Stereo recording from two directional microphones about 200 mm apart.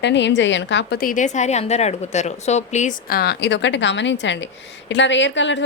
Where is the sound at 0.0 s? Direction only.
60° left (ahead or behind).